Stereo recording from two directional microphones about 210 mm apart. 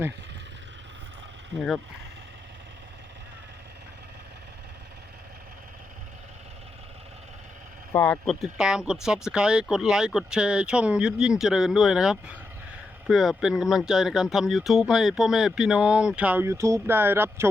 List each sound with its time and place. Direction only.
7.9 s speech: 10° left (ahead or behind); by 17.5 s 10° right (ahead or behind)